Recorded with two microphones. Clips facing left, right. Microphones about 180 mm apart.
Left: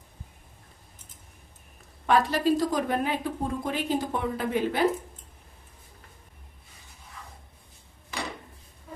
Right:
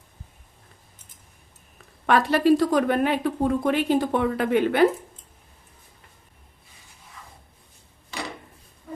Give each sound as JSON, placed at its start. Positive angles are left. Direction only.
{"t": 2.0, "sound": "a woman's voice", "side_deg": -70}